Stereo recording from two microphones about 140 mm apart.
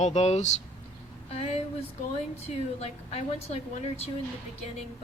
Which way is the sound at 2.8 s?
50° left (ahead or behind).